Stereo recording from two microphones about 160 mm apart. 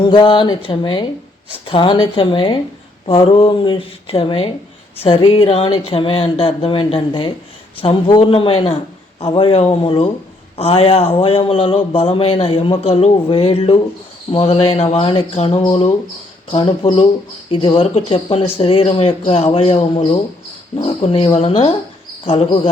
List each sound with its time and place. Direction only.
0.1 s speech: 30° left (ahead or behind)